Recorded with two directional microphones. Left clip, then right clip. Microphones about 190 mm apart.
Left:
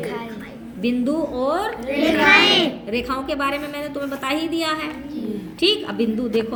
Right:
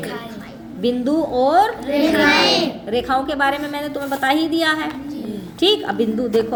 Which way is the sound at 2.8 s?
30° right (ahead or behind).